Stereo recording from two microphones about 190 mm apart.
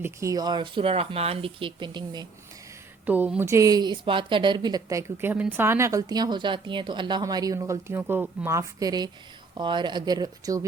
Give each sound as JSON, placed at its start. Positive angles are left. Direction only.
{"t": 0.0, "sound": "speech", "side_deg": -15}
{"t": 3.1, "sound": "speech", "side_deg": -10}